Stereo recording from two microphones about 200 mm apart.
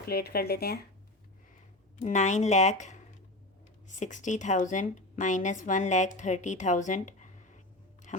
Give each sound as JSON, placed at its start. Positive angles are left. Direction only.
{"t": 0.0, "sound": "speech", "side_deg": 50}
{"t": 2.0, "sound": "speech", "side_deg": 35}